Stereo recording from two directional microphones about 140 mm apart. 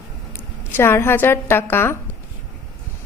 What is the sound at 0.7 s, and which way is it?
A woman's voice, 15° left (ahead or behind).